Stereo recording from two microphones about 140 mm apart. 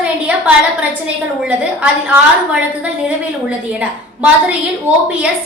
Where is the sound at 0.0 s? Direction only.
10° right (ahead or behind).